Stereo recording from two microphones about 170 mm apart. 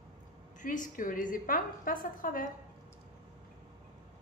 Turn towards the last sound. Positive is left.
turn(degrees=55)  # may be behind; listen again after turning